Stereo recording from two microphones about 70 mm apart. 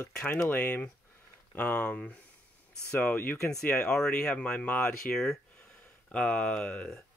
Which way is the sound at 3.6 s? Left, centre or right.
Centre.